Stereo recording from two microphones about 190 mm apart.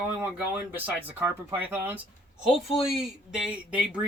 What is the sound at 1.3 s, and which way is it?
Speech, 10° right (ahead or behind).